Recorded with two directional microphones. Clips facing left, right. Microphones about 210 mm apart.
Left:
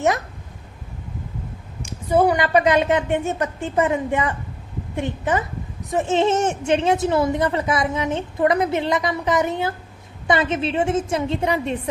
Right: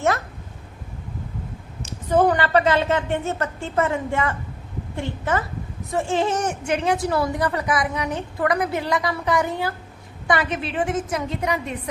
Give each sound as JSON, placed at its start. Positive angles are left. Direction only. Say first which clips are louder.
{"t": 1.8, "sound": "a woman's voice", "louder": "left 1 dB", "side_deg": 10}